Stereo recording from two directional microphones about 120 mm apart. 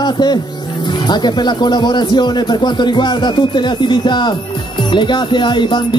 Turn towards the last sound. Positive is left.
turn(degrees=40)  # may be behind; listen again after turning